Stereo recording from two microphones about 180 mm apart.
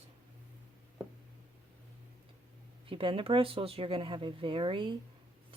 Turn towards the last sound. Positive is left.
turn(degrees=-25)  # may be behind; listen again after turning